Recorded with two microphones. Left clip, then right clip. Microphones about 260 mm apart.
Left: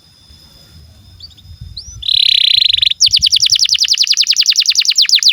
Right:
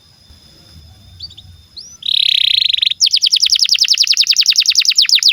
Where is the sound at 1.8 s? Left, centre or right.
Centre.